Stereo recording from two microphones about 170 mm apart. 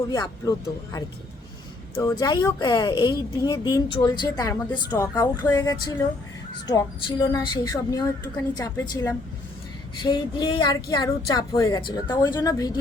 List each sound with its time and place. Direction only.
0.1 s a woman's voice: 20° left (ahead or behind)
2.0 s a woman's voice: 20° left (ahead or behind)